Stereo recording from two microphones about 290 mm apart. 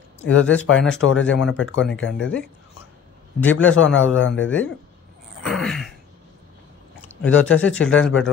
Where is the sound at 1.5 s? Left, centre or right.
Left.